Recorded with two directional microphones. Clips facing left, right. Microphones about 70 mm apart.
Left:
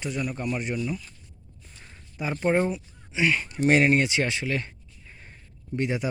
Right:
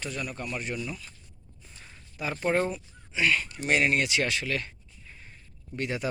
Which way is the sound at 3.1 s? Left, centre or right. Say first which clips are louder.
Left 2 dB; left.